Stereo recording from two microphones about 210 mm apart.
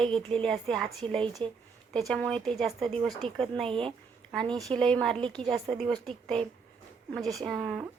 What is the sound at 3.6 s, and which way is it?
Speech, 25° right (ahead or behind).